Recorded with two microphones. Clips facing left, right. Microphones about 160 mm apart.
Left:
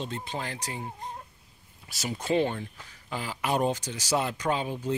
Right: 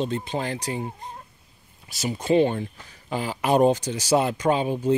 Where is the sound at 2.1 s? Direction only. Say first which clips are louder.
Right 6 dB; 5° right (ahead or behind).